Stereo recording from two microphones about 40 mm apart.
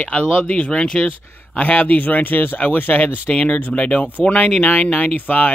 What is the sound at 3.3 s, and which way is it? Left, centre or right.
Speech, left.